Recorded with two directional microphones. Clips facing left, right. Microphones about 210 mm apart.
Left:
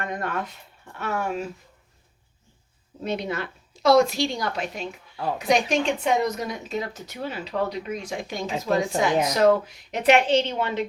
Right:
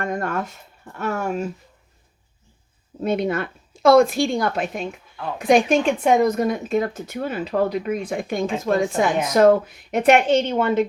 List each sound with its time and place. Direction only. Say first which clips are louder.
0.0 s speech: right 4 dB; 45° right (ahead or behind)
3.0 s speech: right 6 dB; 50° right (ahead or behind)